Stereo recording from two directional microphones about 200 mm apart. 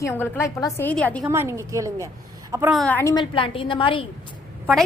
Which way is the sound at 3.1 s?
25° left (ahead or behind).